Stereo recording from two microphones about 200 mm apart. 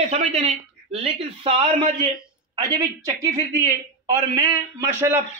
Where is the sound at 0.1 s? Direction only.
30° right (ahead or behind).